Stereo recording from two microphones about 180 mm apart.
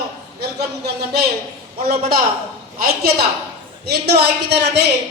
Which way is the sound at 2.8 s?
60° right (ahead or behind).